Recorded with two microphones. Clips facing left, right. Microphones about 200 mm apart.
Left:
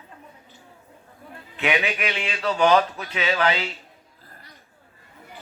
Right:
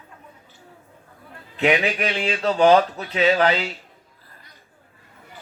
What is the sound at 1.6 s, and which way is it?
A man's voice, 35° right (ahead or behind).